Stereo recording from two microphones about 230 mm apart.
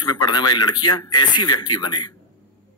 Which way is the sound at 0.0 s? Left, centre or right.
Centre.